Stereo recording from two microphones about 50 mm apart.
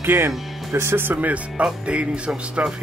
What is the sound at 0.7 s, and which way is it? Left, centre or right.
Speech, right.